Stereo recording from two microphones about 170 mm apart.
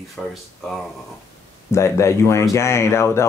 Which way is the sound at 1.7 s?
15° left (ahead or behind).